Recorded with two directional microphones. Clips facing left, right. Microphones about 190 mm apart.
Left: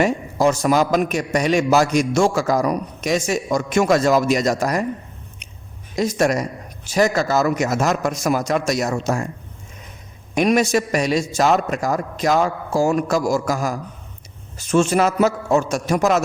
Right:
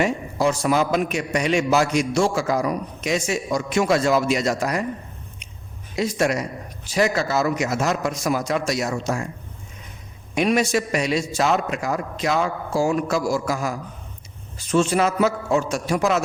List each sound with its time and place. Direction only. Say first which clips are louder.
0.0 s a man's voice: left 3 dB; 45° left (ahead or behind)
6.0 s a man's voice: left 3 dB; 45° left (ahead or behind)
10.3 s a man's voice: left 3 dB; 45° left (ahead or behind)